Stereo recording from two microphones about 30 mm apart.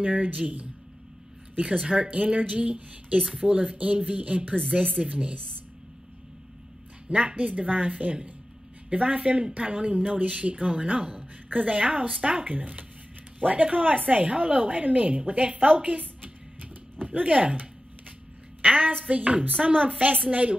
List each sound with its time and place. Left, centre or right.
0.0 s a woman's voice: right
3.7 s a woman's voice: right
7.1 s a woman's voice: right
11.5 s a woman's voice: right
13.4 s a woman's voice: right